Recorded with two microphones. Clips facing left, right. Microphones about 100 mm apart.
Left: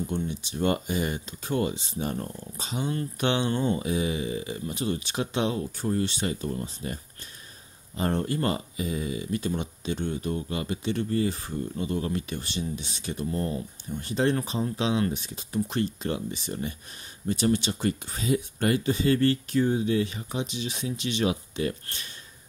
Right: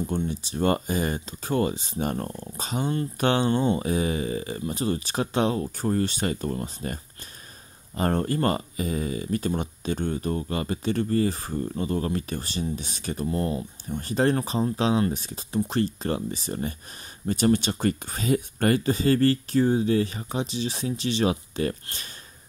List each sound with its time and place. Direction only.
0.1 s speech: 35° right (ahead or behind)
3.5 s mantra: 25° right (ahead or behind)
3.8 s speech: 45° right (ahead or behind)